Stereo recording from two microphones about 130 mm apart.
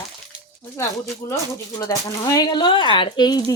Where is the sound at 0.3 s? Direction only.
10° right (ahead or behind).